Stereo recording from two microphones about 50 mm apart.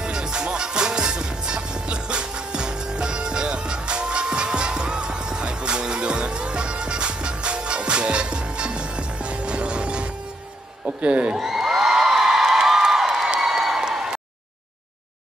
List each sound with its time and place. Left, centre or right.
0.0 s music: centre
11.0 s speech: right
11.3 s a sound: centre